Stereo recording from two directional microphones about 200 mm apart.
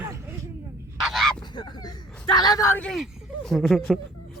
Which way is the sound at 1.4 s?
20° left (ahead or behind).